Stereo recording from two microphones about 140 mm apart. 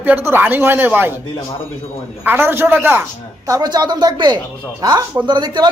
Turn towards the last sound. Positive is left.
turn(degrees=-30)  # may be behind; listen again after turning